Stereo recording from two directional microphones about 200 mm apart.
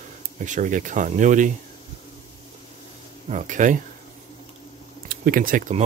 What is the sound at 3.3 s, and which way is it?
Speech, 40° right (ahead or behind).